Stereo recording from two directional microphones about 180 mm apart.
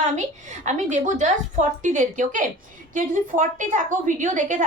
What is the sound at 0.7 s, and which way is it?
A woman's voice, 40° right (ahead or behind).